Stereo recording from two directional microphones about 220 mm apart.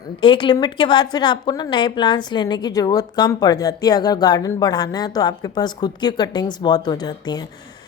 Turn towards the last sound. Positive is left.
turn(degrees=20)  # may be behind; listen again after turning